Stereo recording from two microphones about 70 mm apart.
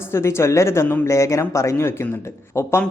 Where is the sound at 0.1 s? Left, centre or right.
Left.